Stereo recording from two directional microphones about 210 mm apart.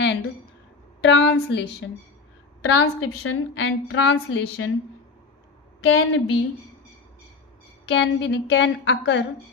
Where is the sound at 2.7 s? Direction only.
90° left; by 4.7 s 60° left (ahead or behind).